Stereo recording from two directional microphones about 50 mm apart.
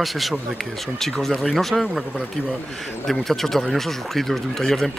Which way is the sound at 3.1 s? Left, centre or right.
Centre.